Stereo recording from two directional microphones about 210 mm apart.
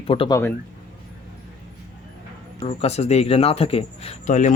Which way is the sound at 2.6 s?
30° left (ahead or behind).